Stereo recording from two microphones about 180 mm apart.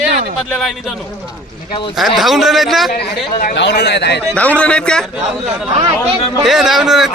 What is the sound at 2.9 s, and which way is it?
Speech, 50° left (ahead or behind).